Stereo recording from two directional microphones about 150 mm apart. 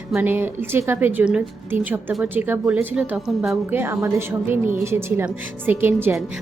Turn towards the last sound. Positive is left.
turn(degrees=-15)  # may be behind; listen again after turning